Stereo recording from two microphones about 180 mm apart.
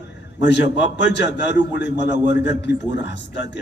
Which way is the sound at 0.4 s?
75° left (ahead or behind).